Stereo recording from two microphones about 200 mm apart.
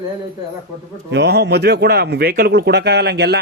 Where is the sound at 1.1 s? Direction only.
55° right (ahead or behind).